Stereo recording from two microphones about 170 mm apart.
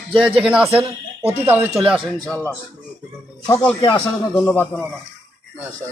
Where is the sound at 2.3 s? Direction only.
15° left (ahead or behind).